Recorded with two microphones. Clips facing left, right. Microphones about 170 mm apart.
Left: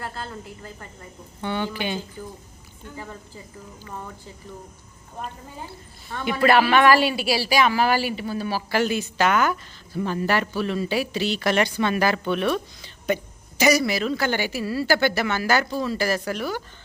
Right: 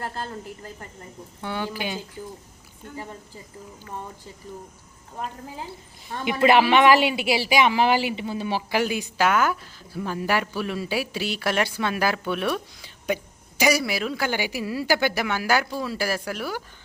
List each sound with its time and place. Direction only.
0.0 s a woman's voice: 40° right (ahead or behind)
1.4 s speech: 5° right (ahead or behind)
6.1 s speech: 15° right (ahead or behind)